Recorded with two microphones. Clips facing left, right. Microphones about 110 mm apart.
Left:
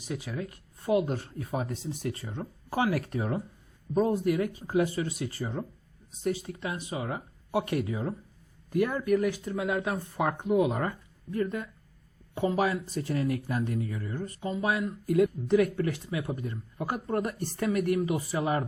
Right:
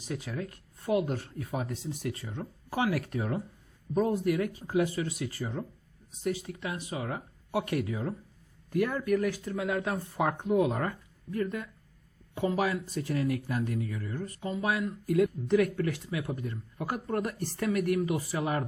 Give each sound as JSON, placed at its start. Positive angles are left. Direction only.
{"t": 0.1, "sound": "speech", "side_deg": 5}
{"t": 0.9, "sound": "speech", "side_deg": 25}
{"t": 9.9, "sound": "speech", "side_deg": 0}
{"t": 11.3, "sound": "speech", "side_deg": 30}